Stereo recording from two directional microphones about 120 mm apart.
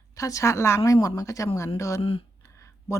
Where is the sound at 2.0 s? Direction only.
50° left (ahead or behind).